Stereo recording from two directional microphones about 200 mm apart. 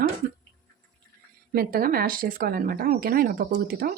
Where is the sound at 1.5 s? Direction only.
45° right (ahead or behind).